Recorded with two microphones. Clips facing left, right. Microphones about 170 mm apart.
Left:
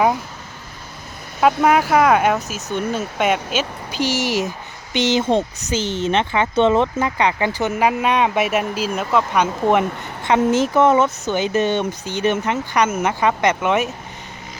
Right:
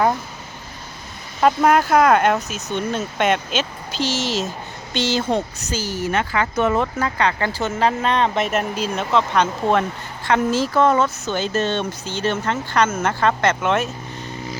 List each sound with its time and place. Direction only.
1.6 s speech: 5° left (ahead or behind)